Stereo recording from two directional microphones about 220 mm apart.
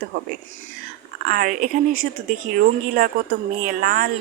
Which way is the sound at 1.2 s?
40° right (ahead or behind).